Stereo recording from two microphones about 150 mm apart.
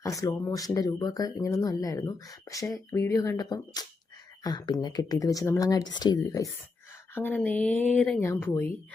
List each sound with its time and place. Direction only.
0.0 s speech: 20° left (ahead or behind)